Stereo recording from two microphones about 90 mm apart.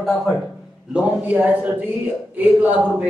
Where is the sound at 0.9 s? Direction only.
15° right (ahead or behind).